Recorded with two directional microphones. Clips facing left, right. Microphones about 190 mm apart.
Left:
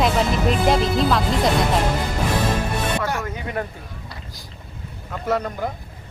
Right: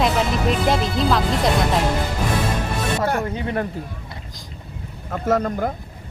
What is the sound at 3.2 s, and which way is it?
Speech, 30° right (ahead or behind).